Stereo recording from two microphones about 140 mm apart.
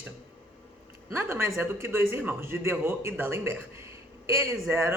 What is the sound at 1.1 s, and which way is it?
A woman's voice, 20° right (ahead or behind).